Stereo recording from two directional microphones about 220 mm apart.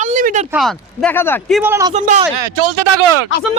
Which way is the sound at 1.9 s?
30° right (ahead or behind).